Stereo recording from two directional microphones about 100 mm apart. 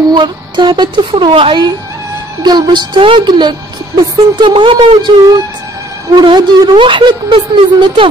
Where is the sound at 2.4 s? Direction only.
45° right (ahead or behind).